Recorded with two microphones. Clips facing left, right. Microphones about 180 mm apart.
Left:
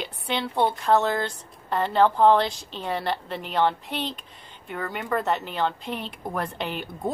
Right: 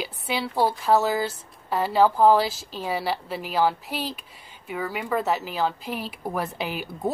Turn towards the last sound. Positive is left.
turn(degrees=-5)  # may be behind; listen again after turning